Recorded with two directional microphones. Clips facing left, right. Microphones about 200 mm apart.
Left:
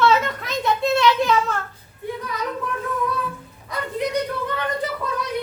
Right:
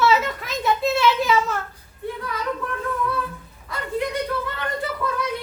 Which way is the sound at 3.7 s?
20° left (ahead or behind).